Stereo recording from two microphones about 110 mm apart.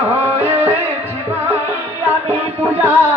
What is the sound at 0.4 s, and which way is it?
Music, 20° right (ahead or behind).